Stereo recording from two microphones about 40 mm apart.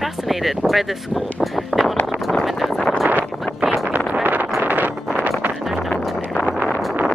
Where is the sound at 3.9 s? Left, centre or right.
Right.